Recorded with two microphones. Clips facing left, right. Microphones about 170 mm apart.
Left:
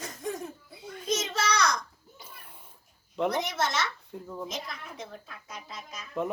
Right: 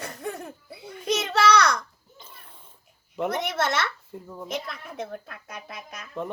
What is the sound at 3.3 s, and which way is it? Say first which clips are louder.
Speech: right 3 dB; 60° right (ahead or behind).